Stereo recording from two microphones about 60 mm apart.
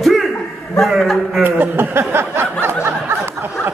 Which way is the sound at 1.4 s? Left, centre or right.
Right.